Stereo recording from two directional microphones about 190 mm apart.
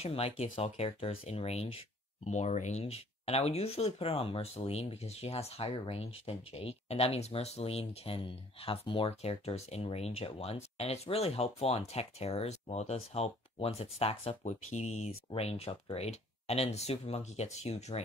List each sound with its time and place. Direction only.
0.0 s speech: 30° left (ahead or behind)